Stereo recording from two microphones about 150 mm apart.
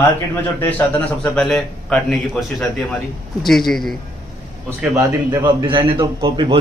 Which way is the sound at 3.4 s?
Centre (ahead or behind).